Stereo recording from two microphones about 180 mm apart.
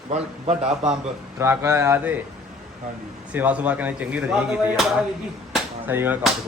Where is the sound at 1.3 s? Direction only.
15° right (ahead or behind).